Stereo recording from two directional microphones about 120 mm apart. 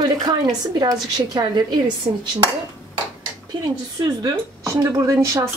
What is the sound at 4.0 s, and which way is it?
Speech, 30° right (ahead or behind).